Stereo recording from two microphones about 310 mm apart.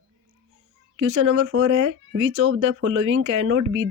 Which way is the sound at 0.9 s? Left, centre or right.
Right.